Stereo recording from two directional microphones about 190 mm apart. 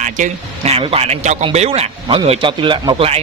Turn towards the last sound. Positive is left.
turn(degrees=-25)  # may be behind; listen again after turning